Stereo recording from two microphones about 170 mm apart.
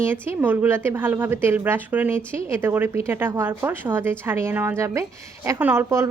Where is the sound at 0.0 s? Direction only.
15° right (ahead or behind).